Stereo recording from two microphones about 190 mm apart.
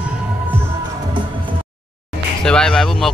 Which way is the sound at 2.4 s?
5° left (ahead or behind).